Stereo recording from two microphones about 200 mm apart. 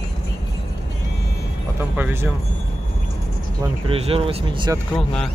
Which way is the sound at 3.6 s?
30° right (ahead or behind).